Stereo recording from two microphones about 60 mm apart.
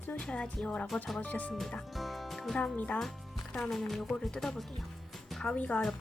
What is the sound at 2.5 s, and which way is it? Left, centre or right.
Speech, left.